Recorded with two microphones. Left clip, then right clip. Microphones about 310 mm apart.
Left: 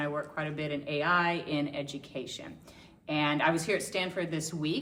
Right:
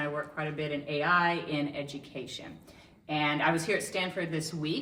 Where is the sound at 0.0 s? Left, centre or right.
Centre.